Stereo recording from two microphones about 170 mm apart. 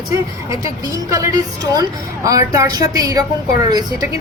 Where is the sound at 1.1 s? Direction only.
20° right (ahead or behind).